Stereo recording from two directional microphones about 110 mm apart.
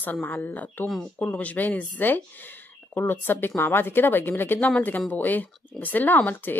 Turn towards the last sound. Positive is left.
turn(degrees=15)  # may be behind; listen again after turning